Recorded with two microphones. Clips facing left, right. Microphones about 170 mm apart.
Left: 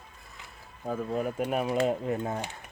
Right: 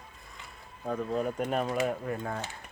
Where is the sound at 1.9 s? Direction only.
20° left (ahead or behind).